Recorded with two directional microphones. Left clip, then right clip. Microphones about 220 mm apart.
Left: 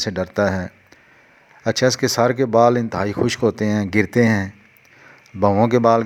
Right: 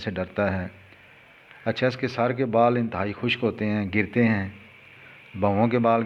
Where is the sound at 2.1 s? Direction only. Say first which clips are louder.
Left 6 dB; 35° left (ahead or behind).